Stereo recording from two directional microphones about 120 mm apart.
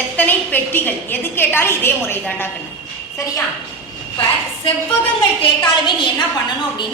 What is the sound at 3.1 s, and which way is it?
Speech, 30° left (ahead or behind).